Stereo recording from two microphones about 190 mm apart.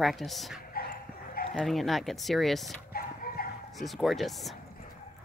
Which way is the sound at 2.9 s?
50° left (ahead or behind).